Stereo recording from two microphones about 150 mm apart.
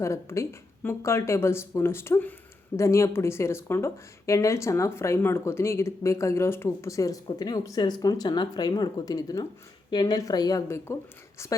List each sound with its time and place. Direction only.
0.0 s speech: 20° left (ahead or behind)